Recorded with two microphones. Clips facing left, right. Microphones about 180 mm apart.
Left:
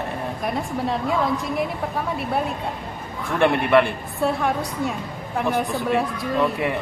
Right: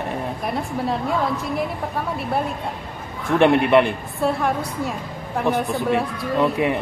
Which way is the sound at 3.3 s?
20° right (ahead or behind).